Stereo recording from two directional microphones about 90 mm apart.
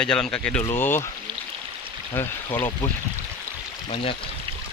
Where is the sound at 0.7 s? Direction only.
25° left (ahead or behind).